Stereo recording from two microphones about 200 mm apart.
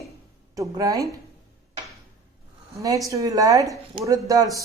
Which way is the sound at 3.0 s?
15° right (ahead or behind).